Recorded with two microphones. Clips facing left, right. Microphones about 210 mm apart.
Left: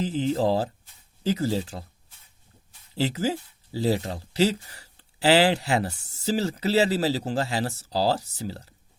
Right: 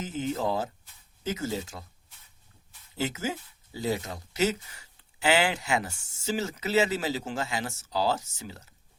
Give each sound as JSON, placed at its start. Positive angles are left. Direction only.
{"t": 0.0, "sound": "speech", "side_deg": 35}
{"t": 2.9, "sound": "speech", "side_deg": 35}